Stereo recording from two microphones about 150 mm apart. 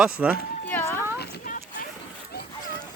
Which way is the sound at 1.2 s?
65° left (ahead or behind).